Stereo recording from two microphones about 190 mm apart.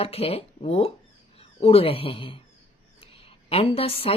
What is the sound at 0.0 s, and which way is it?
A woman's voice, 30° left (ahead or behind).